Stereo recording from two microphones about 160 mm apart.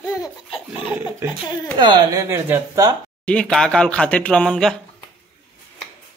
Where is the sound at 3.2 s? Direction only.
5° left (ahead or behind).